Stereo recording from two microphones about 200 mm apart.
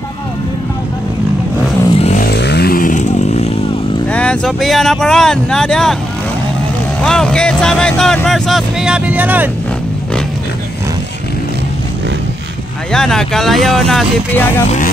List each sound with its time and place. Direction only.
2.0 s vehicle: 35° left (ahead or behind)
2.2 s vehicle: 55° left (ahead or behind); by 3.5 s 35° left (ahead or behind)
4.1 s speech: 5° left (ahead or behind)
7.1 s speech: 5° left (ahead or behind)
12.9 s speech: 5° left (ahead or behind)